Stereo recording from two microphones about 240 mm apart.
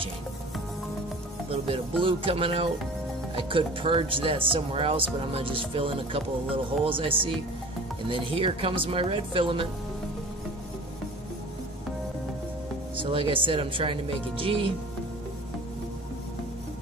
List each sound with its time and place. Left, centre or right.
1.5 s speech: right
12.9 s speech: right